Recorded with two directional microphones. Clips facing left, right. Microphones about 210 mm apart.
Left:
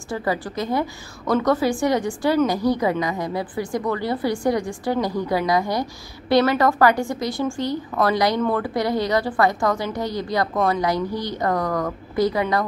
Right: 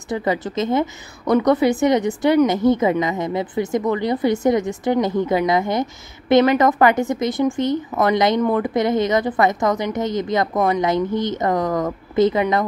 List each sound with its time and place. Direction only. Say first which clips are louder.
0.1 s a woman's voice: right 3 dB; 20° right (ahead or behind)